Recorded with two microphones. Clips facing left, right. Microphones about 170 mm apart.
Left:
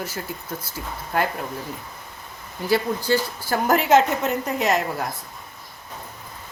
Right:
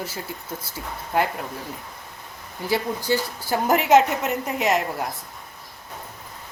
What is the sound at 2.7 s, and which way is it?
A woman's voice, 15° right (ahead or behind).